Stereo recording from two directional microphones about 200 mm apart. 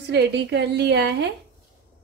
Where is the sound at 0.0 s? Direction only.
55° right (ahead or behind).